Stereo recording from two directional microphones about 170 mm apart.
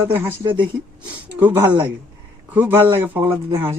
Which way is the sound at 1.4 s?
15° right (ahead or behind).